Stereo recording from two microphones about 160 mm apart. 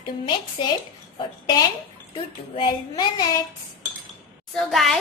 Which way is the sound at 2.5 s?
35° left (ahead or behind).